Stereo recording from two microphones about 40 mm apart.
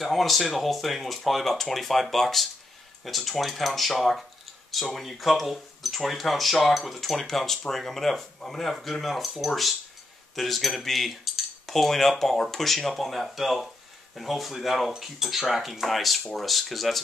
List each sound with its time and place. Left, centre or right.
0.0 s speech: centre
10.3 s cutlery: centre
12.2 s speech: centre